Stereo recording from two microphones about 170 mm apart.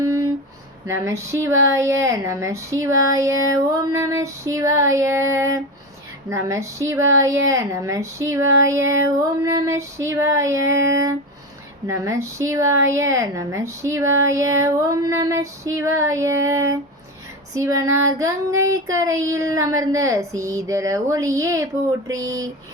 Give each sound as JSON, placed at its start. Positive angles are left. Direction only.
{"t": 0.9, "sound": "a woman's voice", "side_deg": -15}
{"t": 17.5, "sound": "child singing", "side_deg": -20}